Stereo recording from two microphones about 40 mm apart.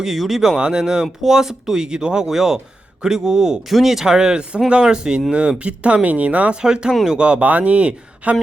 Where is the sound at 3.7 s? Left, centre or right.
Centre; by 6.6 s right.